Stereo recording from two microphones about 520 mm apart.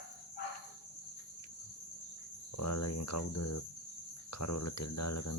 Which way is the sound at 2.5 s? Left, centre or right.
Left.